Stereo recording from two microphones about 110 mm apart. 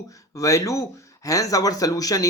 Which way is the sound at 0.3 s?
30° left (ahead or behind).